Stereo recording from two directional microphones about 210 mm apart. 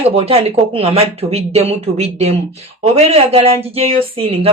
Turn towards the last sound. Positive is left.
turn(degrees=-25)  # may be behind; listen again after turning